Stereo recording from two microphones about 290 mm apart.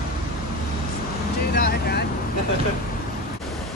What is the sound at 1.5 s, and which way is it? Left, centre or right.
Vehicle, left.